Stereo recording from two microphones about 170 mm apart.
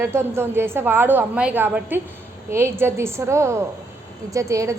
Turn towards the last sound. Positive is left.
turn(degrees=-20)  # may be behind; listen again after turning